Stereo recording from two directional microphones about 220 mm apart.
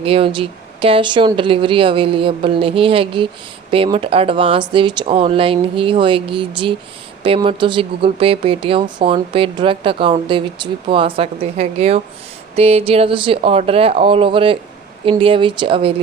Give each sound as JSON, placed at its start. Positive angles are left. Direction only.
{"t": 0.0, "sound": "speech", "side_deg": -25}